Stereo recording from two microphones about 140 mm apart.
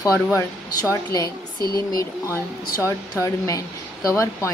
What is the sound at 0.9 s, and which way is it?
A woman's voice, 25° left (ahead or behind).